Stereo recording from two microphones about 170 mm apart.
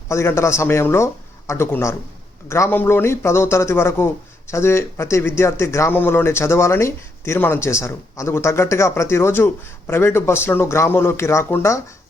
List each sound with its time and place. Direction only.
0.1 s speech: 15° left (ahead or behind)